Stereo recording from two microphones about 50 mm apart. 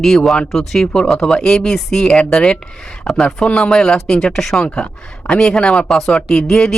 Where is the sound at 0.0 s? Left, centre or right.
Centre.